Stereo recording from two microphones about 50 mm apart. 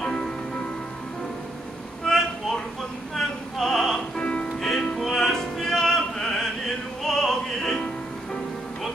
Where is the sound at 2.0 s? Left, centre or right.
Centre.